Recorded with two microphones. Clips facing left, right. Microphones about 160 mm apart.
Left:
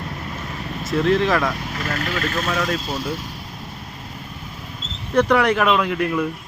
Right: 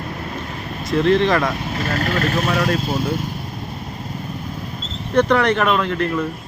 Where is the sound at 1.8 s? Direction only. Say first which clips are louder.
Right 4 dB; 30° right (ahead or behind).